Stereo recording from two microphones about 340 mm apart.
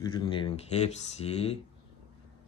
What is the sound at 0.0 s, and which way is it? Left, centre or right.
Speech, centre.